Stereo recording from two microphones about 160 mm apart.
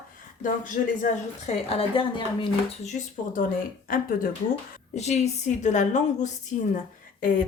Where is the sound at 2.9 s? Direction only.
55° left (ahead or behind).